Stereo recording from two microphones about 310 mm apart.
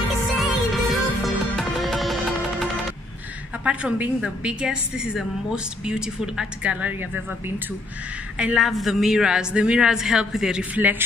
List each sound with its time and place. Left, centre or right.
0.4 s music: centre
3.6 s a woman's voice: centre